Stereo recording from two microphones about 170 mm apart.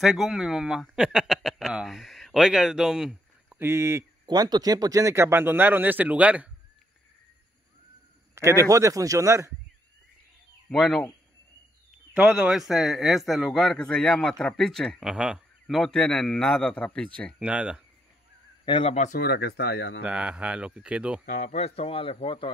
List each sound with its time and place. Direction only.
0.0 s speech: centre (ahead or behind)
8.4 s speech: 15° right (ahead or behind)
10.7 s speech: 5° left (ahead or behind)
12.1 s speech: 5° right (ahead or behind)
17.4 s speech: 5° right (ahead or behind)
18.7 s speech: 35° left (ahead or behind)
19.1 s speech: 65° left (ahead or behind)
20.0 s speech: 5° right (ahead or behind)
21.3 s speech: 45° left (ahead or behind)